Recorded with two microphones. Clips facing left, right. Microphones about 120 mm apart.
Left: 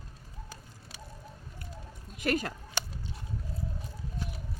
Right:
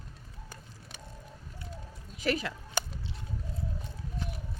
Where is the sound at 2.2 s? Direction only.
45° left (ahead or behind).